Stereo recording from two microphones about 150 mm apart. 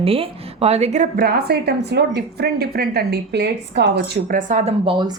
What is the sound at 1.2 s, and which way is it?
A woman's voice, 90° right.